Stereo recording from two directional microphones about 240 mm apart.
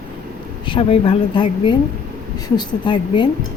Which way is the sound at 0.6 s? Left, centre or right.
Left.